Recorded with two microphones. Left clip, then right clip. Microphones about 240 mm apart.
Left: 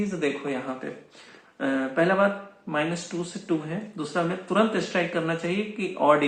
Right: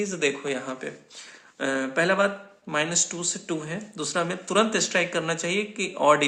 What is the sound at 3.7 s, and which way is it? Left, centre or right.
Speech, right.